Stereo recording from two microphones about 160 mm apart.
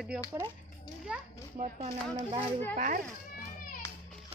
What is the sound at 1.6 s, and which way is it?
Speech, 45° right (ahead or behind).